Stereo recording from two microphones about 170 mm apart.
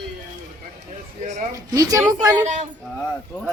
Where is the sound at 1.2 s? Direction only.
45° right (ahead or behind).